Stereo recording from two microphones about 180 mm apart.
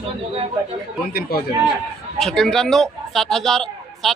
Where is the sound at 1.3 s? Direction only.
55° left (ahead or behind).